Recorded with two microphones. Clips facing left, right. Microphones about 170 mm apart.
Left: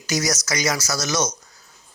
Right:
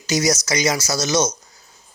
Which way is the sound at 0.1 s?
25° right (ahead or behind).